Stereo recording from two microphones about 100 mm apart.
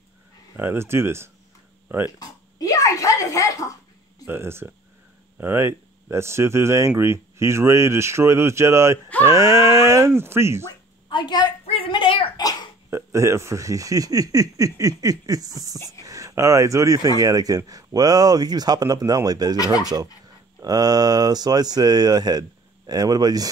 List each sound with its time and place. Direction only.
0.6 s speech: 25° right (ahead or behind)
2.1 s a sound: 35° left (ahead or behind)
4.3 s speech: 25° right (ahead or behind)
11.1 s a woman's voice: 50° left (ahead or behind)
11.6 s a sound: 65° left (ahead or behind)
12.9 s speech: 30° right (ahead or behind)
19.5 s speech: 40° left (ahead or behind)
20.6 s speech: 40° right (ahead or behind)